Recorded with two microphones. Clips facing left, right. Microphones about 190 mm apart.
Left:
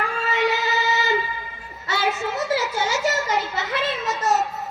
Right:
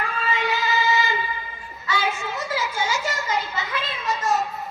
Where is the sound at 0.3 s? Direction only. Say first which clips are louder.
Left 5 dB; 70° left (ahead or behind).